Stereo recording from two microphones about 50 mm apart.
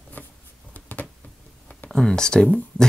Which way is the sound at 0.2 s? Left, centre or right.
Left.